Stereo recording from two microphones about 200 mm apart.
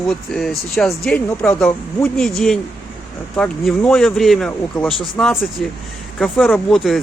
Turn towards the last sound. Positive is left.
turn(degrees=0)  # may be behind; listen again after turning